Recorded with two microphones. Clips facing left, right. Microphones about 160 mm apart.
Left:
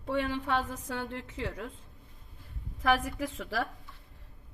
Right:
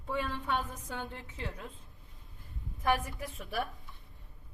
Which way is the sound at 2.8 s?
90° left.